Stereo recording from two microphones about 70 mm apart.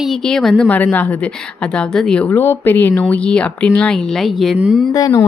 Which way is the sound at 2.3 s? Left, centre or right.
Left.